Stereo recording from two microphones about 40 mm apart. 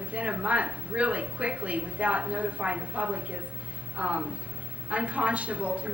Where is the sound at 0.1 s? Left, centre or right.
Right.